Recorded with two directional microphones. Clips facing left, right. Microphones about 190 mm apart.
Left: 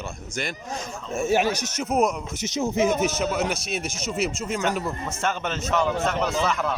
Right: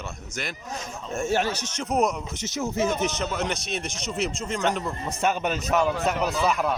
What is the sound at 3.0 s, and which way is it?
Speech, 5° left (ahead or behind).